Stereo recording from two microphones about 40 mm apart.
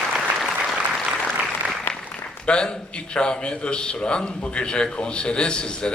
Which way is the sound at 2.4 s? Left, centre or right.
Left.